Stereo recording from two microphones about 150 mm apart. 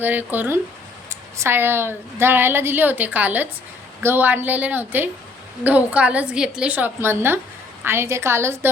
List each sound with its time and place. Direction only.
0.0 s a woman's voice: 10° right (ahead or behind)